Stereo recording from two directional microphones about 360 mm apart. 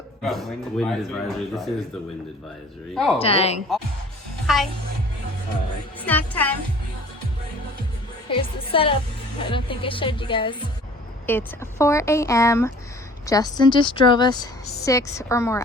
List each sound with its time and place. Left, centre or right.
0.2 s a man's voice: centre
2.9 s a man's voice: centre
3.2 s a woman's voice: centre
4.4 s music: centre
6.1 s a man's voice: centre
8.3 s a woman's voice: centre